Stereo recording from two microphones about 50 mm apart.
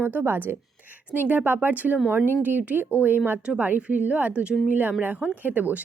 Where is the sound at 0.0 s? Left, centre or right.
Right.